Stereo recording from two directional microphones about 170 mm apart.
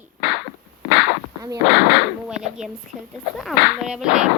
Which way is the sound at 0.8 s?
80° left.